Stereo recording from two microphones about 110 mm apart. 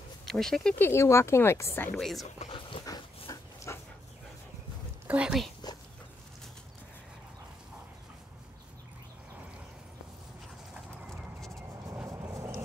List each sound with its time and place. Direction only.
0.2 s speech: 5° left (ahead or behind)
0.7 s speech: 20° left (ahead or behind)
2.0 s speech: centre (ahead or behind)
2.2 s speech: 90° left
2.8 s dog: 35° left (ahead or behind)
5.0 s a sound: 15° right (ahead or behind)
5.6 s insect: 40° left (ahead or behind)
10.7 s clip-clop: centre (ahead or behind)
12.1 s vehicle: 30° right (ahead or behind)